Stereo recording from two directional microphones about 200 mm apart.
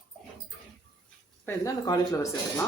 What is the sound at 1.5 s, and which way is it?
Speech, 15° left (ahead or behind).